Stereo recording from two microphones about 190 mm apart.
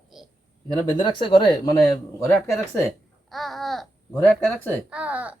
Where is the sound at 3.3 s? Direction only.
Centre (ahead or behind).